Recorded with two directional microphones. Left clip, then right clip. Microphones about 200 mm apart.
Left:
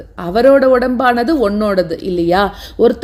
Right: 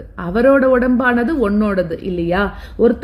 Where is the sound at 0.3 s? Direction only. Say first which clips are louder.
Left 3 dB; 10° left (ahead or behind).